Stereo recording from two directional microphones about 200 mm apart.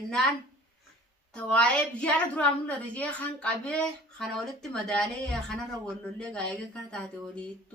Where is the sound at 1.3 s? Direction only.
5° left (ahead or behind).